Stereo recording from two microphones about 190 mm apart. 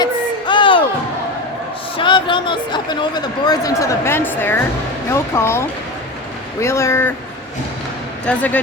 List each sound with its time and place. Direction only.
0.0 s a sound: 25° left (ahead or behind)
2.0 s speech: 25° left (ahead or behind)
8.2 s speech: 5° left (ahead or behind)